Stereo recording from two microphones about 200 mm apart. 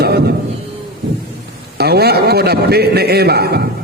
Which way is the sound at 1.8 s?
55° right (ahead or behind).